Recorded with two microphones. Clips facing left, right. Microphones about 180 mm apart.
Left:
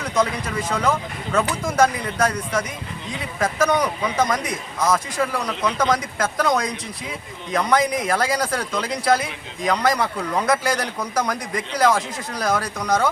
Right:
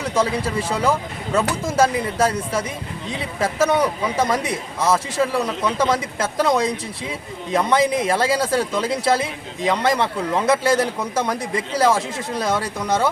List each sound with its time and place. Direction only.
0.1 s speech: 30° right (ahead or behind)